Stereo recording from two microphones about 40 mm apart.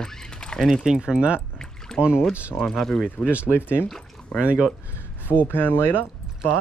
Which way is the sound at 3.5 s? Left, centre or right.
Left.